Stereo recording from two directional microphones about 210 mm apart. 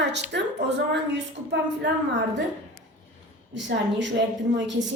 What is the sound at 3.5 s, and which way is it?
Speech, 60° right (ahead or behind).